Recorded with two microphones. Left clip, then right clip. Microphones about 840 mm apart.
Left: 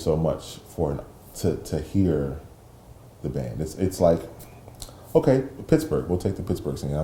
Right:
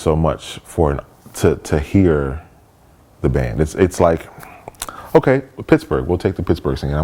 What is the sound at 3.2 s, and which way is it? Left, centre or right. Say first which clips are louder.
Speech: right 12 dB; right.